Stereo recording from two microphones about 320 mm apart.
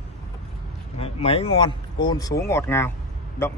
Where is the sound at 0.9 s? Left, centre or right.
Centre.